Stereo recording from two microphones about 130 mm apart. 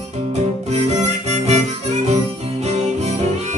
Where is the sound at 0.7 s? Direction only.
55° right (ahead or behind).